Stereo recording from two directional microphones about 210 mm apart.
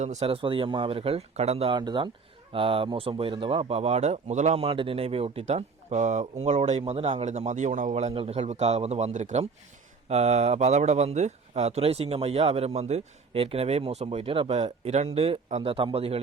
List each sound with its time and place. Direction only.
0.0 s speech: 30° right (ahead or behind)